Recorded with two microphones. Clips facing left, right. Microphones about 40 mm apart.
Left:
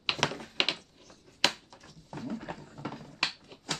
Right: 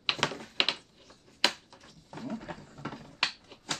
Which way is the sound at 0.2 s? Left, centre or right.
Centre.